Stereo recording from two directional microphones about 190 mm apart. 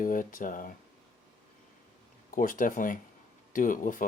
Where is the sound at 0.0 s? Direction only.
45° left (ahead or behind).